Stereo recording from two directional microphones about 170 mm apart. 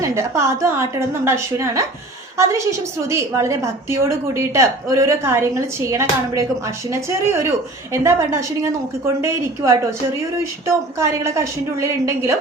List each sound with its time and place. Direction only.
0.0 s a woman's voice: 15° right (ahead or behind)